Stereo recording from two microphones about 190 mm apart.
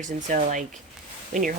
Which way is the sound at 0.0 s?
40° right (ahead or behind).